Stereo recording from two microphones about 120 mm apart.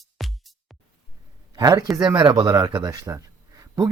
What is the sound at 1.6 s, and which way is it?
Speech, 30° right (ahead or behind).